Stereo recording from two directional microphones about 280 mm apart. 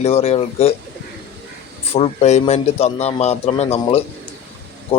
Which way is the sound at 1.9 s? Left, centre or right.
Left.